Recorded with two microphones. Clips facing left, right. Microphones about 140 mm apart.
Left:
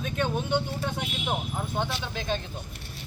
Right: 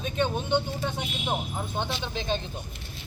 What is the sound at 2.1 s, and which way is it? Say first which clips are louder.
Speech: right 1 dB; 25° right (ahead or behind).